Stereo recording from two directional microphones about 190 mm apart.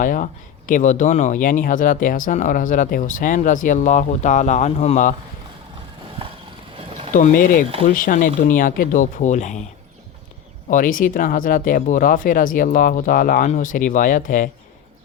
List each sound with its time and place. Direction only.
0.0 s speech: 45° left (ahead or behind)
6.7 s boat: 30° right (ahead or behind)
7.1 s speech: 45° left (ahead or behind)
10.7 s speech: 45° left (ahead or behind)